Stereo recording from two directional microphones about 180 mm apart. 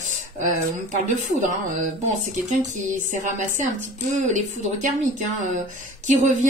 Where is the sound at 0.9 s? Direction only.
45° right (ahead or behind).